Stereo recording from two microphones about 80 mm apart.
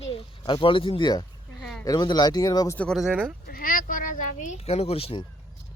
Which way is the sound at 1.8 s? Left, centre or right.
Left.